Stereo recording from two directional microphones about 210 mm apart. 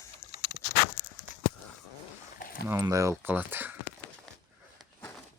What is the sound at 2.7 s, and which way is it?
Speech, 15° right (ahead or behind).